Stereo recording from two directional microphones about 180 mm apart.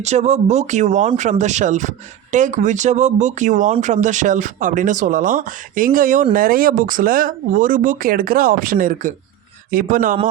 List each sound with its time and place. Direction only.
0.0 s speech: 40° right (ahead or behind)